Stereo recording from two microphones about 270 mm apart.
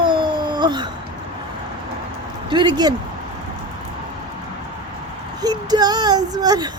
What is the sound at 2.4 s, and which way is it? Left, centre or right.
Speech, centre.